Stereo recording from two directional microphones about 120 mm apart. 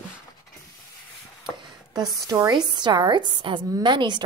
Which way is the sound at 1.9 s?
25° right (ahead or behind).